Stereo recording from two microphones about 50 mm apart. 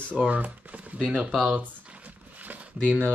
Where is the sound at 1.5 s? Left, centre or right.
Right.